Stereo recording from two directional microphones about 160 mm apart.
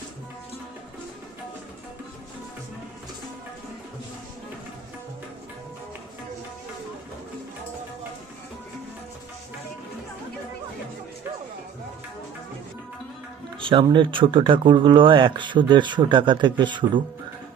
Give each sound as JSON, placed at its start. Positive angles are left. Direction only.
{"t": 13.6, "sound": "speech", "side_deg": -35}